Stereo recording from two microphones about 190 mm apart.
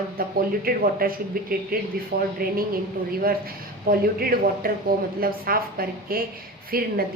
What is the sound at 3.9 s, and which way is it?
A woman's voice, 50° right (ahead or behind).